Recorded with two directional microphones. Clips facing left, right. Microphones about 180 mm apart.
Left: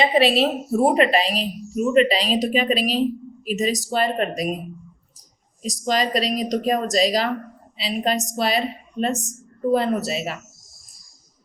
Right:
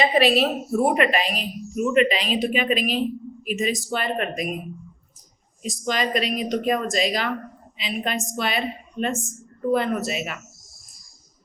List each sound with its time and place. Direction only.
0.0 s a woman's voice: 25° left (ahead or behind)
5.6 s a woman's voice: 35° left (ahead or behind)